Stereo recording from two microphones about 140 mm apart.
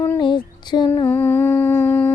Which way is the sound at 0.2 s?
35° left (ahead or behind).